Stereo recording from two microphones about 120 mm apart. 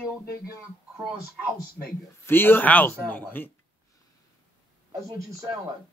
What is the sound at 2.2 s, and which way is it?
A man's voice, 15° left (ahead or behind).